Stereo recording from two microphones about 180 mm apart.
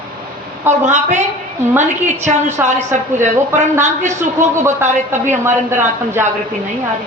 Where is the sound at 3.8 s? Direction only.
40° right (ahead or behind).